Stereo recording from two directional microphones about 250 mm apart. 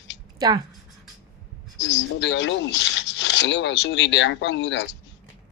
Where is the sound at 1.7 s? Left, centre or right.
Left.